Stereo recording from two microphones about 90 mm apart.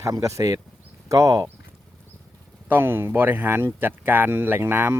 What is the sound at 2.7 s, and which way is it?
Speech, 25° right (ahead or behind).